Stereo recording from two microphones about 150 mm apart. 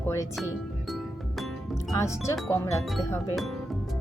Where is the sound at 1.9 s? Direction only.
20° left (ahead or behind).